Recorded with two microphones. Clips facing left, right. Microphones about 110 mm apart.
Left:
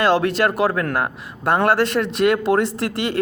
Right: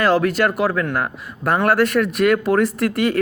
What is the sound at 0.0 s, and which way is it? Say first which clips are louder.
Speech: right 1 dB; 30° left (ahead or behind).